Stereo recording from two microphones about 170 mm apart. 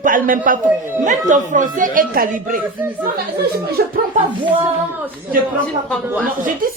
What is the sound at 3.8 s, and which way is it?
Speech, 65° right (ahead or behind).